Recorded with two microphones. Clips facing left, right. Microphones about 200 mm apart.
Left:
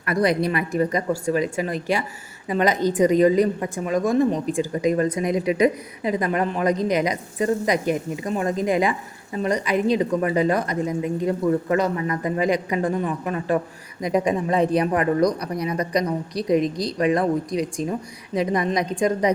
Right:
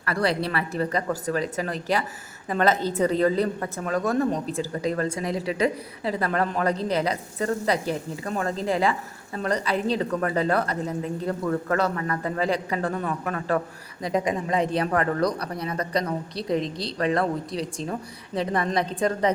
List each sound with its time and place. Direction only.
0.0 s a woman's voice: 15° left (ahead or behind)
14.5 s a man's voice: 20° right (ahead or behind)
14.8 s a woman's voice: 15° left (ahead or behind)
16.6 s a man's voice: 30° right (ahead or behind)
17.0 s a woman's voice: 15° left (ahead or behind)